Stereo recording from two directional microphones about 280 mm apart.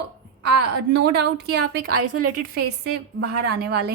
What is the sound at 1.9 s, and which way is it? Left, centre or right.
Speech, right.